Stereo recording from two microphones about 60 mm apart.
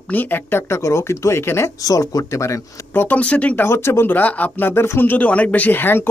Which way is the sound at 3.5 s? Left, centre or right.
Left.